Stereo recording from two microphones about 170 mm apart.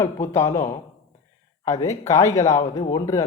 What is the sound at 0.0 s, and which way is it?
Speech, 15° left (ahead or behind).